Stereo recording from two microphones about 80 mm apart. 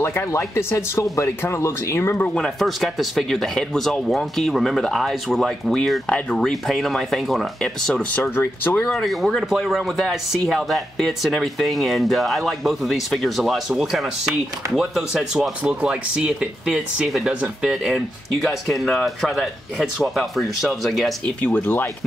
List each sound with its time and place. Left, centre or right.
0.0 s speech: left
2.2 s speech: centre
8.1 s speech: left
8.9 s speech: centre
21.4 s speech: centre